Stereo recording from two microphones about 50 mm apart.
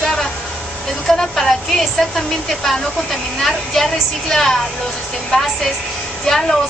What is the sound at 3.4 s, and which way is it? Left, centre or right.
Speech, centre.